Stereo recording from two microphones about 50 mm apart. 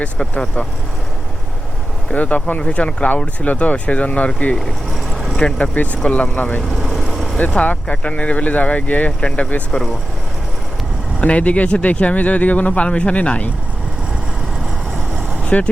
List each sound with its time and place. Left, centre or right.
0.2 s speech: centre
2.1 s speech: left
5.1 s vehicle: centre
5.4 s speech: centre
6.1 s speech: left
6.6 s vehicle: centre
7.5 s speech: left
11.2 s speech: left
15.4 s speech: left